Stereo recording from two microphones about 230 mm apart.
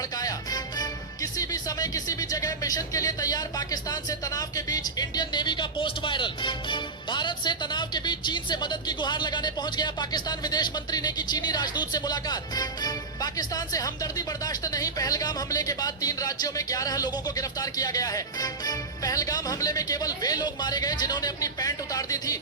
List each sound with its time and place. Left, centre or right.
0.2 s speech: centre